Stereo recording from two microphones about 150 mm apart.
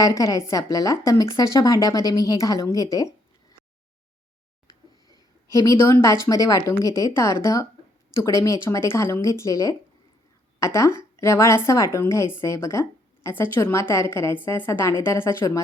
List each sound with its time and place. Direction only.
0.0 s a woman's voice: 20° left (ahead or behind)
5.5 s a woman's voice: 20° left (ahead or behind)